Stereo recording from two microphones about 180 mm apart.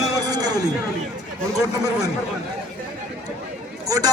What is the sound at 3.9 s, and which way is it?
Speech, 20° right (ahead or behind).